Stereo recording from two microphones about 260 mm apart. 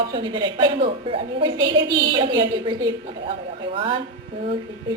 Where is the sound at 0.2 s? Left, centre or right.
Centre.